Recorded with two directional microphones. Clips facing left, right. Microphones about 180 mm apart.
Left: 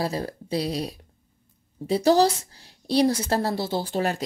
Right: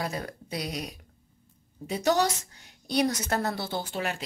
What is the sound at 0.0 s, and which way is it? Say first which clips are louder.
A woman's voice: left 6 dB; 30° left (ahead or behind).